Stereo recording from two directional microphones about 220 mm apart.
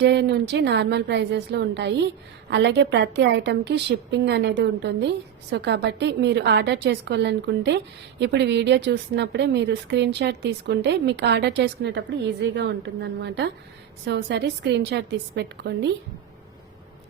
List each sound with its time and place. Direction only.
0.0 s a woman's voice: 50° right (ahead or behind)